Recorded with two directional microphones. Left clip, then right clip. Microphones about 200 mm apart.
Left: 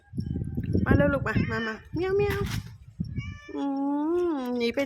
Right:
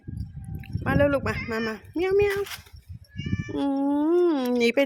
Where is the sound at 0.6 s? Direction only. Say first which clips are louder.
Right 2 dB; 25° right (ahead or behind).